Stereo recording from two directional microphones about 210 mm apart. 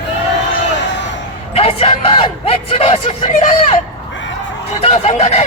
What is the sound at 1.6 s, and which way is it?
Speech, 30° left (ahead or behind).